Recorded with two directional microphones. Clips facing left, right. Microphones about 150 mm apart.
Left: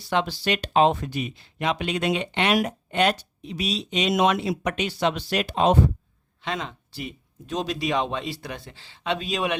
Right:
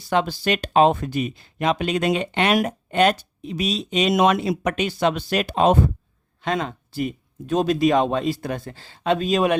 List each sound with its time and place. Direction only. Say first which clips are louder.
0.1 s speech: right 3 dB; 45° right (ahead or behind)